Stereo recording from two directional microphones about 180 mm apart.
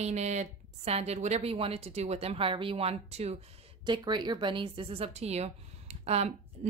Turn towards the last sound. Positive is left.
turn(degrees=-35)  # may be behind; listen again after turning